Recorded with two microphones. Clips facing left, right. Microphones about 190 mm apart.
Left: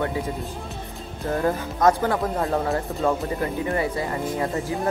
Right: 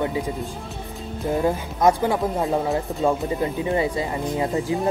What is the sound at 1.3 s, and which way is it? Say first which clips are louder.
Speech: right 1 dB; 10° right (ahead or behind).